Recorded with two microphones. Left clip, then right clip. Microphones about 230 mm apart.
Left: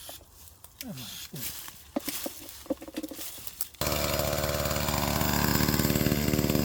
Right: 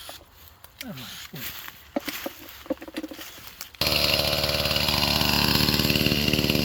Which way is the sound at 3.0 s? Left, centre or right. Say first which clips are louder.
Right 3 dB; left.